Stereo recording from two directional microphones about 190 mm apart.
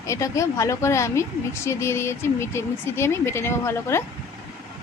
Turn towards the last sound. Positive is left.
turn(degrees=15)  # may be behind; listen again after turning